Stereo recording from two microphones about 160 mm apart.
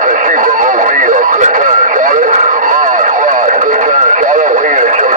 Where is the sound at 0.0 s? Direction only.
55° right (ahead or behind).